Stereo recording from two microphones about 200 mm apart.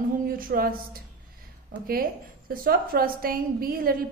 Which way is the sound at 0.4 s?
45° right (ahead or behind).